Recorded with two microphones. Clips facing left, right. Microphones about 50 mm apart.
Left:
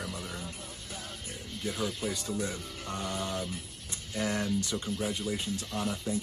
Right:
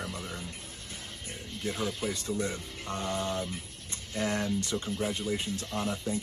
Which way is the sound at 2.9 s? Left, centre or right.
Right.